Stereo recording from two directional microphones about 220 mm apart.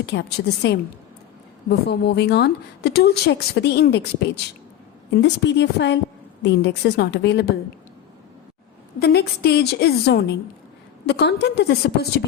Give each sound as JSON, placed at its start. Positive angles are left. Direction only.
{"t": 0.0, "sound": "speech", "side_deg": 50}
{"t": 1.9, "sound": "speech", "side_deg": 50}
{"t": 9.0, "sound": "speech", "side_deg": 45}